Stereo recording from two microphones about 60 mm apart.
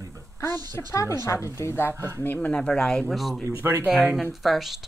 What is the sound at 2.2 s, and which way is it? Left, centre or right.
Speech, left.